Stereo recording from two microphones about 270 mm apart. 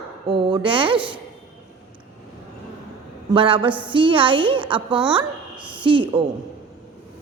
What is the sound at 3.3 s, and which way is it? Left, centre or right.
A woman's voice, centre.